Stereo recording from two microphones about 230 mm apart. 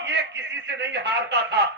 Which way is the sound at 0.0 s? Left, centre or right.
Right.